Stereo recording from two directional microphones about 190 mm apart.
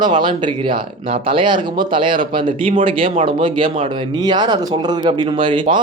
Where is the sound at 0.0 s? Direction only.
25° right (ahead or behind).